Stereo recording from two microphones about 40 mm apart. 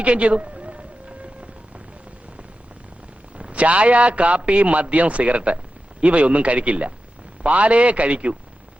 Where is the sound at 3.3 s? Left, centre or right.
Right.